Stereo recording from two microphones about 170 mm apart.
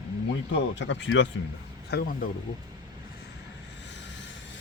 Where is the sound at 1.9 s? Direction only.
70° left (ahead or behind).